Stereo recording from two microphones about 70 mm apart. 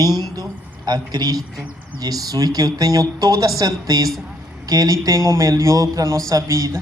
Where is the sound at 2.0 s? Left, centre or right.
Right.